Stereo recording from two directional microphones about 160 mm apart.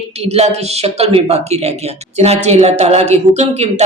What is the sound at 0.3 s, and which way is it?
Speech, 40° right (ahead or behind).